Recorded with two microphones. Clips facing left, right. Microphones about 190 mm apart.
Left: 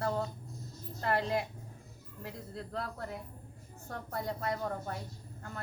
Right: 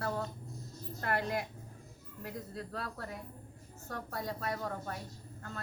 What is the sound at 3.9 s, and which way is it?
A woman's voice, 20° left (ahead or behind).